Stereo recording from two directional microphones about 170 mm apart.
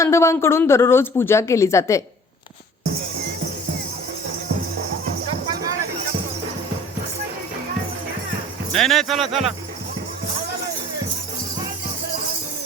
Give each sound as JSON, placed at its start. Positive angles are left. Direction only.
{"t": 0.0, "sound": "speech", "side_deg": 15}
{"t": 8.7, "sound": "speech", "side_deg": 0}